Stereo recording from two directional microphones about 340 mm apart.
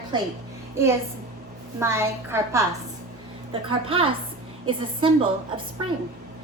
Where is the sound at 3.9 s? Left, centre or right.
Centre.